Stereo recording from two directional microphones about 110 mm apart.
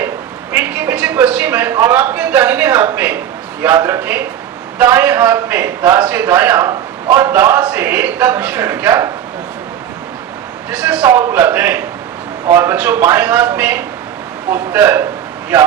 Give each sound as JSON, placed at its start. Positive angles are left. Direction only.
{"t": 0.5, "sound": "a man's voice", "side_deg": -15}
{"t": 10.7, "sound": "a man's voice", "side_deg": -10}